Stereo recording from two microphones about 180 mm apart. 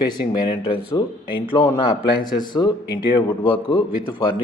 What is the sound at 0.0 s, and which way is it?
Speech, 25° left (ahead or behind).